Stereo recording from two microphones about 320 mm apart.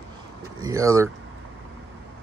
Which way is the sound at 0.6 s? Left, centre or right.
Centre.